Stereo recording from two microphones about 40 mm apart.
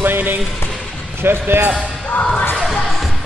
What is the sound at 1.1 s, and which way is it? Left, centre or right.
Speech, right.